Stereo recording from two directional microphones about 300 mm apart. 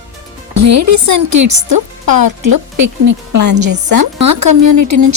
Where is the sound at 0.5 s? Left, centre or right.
Right.